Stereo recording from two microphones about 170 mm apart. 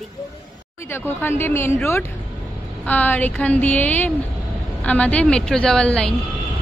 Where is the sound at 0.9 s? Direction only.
10° left (ahead or behind).